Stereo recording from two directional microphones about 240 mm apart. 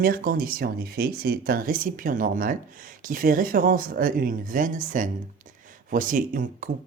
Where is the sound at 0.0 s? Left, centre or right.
Right.